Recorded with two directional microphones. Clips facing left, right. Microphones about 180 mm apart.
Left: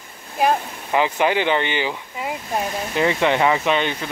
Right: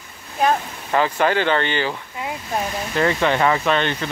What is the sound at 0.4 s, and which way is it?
Speech, 10° left (ahead or behind).